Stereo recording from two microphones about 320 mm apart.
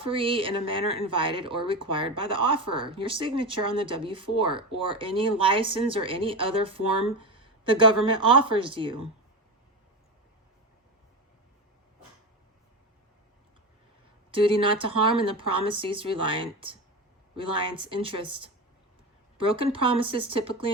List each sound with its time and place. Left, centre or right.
0.0 s speech: centre
14.3 s speech: centre